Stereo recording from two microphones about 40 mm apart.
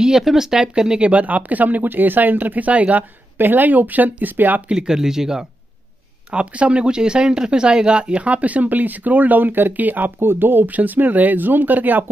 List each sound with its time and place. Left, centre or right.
0.2 s speech: centre
1.0 s speech: right
3.3 s speech: right
4.7 s speech: centre
6.3 s speech: right
10.2 s speech: right
10.7 s speech: right